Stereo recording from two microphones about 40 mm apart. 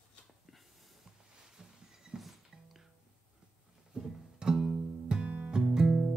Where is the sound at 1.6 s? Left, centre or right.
Centre.